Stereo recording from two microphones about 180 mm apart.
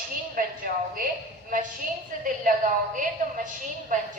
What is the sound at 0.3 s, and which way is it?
Speech, 50° right (ahead or behind).